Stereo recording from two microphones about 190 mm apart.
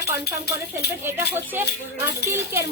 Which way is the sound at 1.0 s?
10° right (ahead or behind).